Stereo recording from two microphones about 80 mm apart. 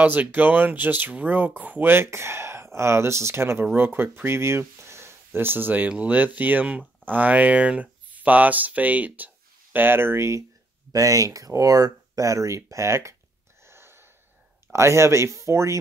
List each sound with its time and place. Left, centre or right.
0.0 s speech: right
10.9 s speech: right
13.7 s wheeze: right
14.7 s speech: right